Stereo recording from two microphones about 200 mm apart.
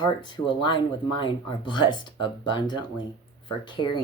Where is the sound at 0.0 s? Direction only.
25° left (ahead or behind).